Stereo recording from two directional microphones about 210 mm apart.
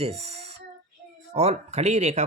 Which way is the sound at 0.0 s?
30° right (ahead or behind).